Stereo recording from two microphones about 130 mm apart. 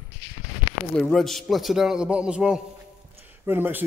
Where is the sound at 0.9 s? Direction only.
5° left (ahead or behind).